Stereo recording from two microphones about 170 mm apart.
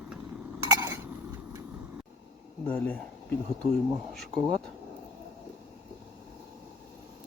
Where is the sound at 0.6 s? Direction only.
20° right (ahead or behind).